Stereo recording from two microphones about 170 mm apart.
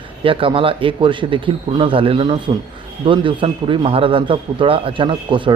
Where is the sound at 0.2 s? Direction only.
30° right (ahead or behind).